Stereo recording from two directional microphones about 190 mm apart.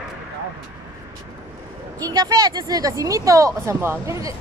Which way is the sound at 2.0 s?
20° right (ahead or behind).